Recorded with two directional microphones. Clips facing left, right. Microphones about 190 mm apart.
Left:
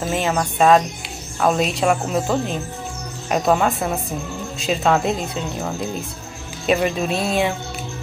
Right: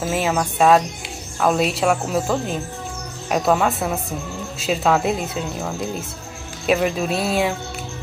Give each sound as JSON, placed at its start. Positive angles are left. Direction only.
{"t": 0.0, "sound": "speech", "side_deg": -5}